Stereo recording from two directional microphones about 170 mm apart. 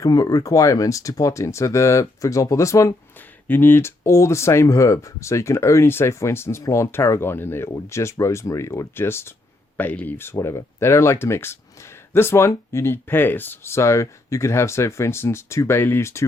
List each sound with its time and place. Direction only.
0.0 s speech: 20° left (ahead or behind)